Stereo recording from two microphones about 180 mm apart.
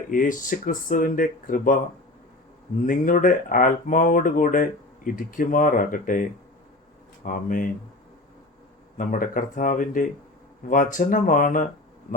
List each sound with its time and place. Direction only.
0.1 s speech: 50° left (ahead or behind)
2.8 s speech: 50° left (ahead or behind)
7.3 s speech: 50° left (ahead or behind)
9.0 s speech: 50° left (ahead or behind)